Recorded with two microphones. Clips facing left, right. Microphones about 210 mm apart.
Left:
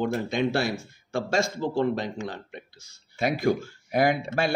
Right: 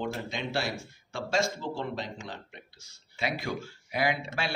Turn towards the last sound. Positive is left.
turn(degrees=50)  # may be behind; listen again after turning